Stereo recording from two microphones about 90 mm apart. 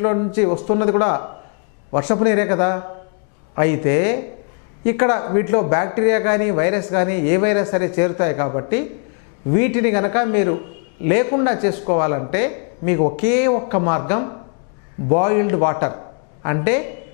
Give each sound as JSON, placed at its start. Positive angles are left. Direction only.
{"t": 0.0, "sound": "speech", "side_deg": 20}